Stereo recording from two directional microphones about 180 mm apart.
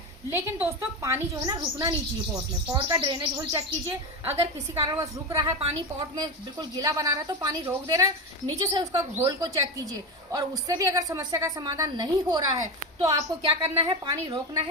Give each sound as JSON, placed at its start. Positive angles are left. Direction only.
{"t": 0.3, "sound": "a woman's voice", "side_deg": -10}